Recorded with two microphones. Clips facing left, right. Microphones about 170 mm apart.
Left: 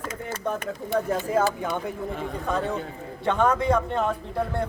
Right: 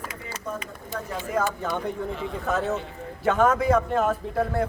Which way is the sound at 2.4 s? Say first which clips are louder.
Right 1 dB; 5° right (ahead or behind).